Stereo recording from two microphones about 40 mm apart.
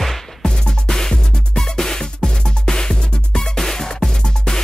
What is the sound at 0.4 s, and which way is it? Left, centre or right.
Music, centre.